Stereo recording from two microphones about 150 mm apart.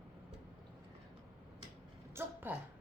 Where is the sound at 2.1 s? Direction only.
15° right (ahead or behind).